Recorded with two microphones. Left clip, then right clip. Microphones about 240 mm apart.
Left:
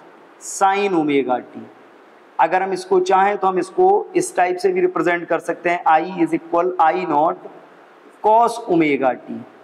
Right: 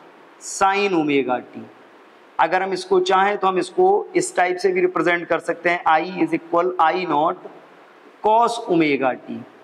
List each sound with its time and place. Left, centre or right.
0.5 s speech: right